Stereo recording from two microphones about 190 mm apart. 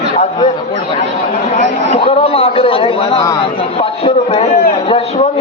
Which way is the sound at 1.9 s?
30° left (ahead or behind).